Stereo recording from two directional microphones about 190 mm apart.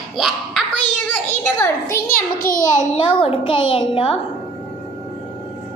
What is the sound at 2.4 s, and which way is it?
Speech, 45° left (ahead or behind).